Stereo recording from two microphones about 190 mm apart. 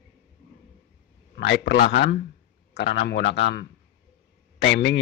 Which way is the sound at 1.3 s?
55° left (ahead or behind).